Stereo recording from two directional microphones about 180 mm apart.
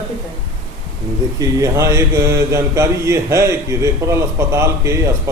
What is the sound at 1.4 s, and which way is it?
Speech, 15° right (ahead or behind).